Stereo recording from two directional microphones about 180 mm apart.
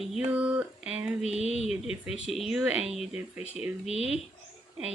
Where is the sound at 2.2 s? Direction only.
Centre (ahead or behind).